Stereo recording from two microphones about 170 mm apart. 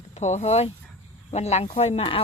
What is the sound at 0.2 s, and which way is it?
Speech, 40° left (ahead or behind).